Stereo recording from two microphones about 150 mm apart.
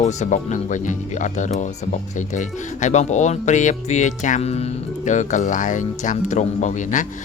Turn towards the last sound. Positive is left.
turn(degrees=55)  # may be behind; listen again after turning